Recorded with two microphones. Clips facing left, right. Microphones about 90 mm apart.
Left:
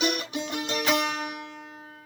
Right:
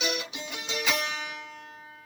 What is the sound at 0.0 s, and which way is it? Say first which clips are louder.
Music: left 5 dB; 50° left (ahead or behind).